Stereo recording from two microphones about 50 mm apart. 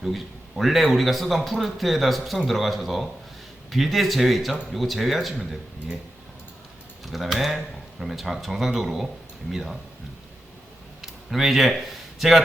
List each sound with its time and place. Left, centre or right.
0.0 s a man's voice: centre
7.0 s a man's voice: centre
11.0 s speech: centre